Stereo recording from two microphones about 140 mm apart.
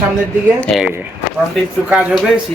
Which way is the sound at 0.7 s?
5° left (ahead or behind).